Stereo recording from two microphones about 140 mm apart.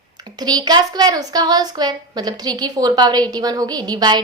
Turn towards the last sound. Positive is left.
turn(degrees=-30)  # may be behind; listen again after turning